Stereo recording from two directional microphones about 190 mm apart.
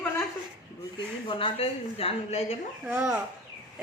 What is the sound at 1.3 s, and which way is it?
Speech, 30° left (ahead or behind).